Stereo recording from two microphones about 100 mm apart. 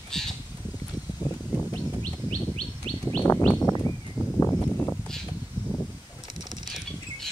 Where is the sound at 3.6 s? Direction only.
25° left (ahead or behind).